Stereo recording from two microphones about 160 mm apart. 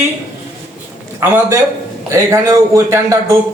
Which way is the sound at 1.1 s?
20° right (ahead or behind).